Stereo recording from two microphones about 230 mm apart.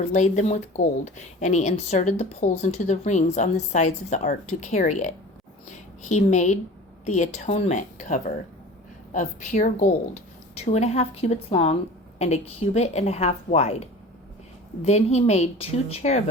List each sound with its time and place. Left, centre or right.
0.1 s a woman's voice: left